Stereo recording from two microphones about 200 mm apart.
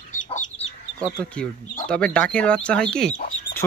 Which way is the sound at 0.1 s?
40° left (ahead or behind).